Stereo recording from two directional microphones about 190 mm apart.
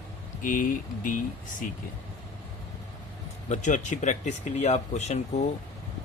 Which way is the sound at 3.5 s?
40° left (ahead or behind).